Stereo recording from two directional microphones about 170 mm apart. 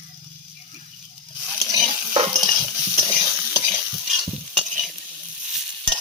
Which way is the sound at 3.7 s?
5° right (ahead or behind).